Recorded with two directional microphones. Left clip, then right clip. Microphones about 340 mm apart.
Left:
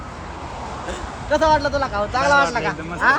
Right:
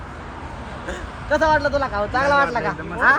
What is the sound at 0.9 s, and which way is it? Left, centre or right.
Speech, centre.